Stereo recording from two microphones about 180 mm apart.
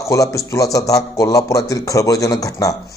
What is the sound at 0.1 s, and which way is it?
A man's voice, 20° left (ahead or behind).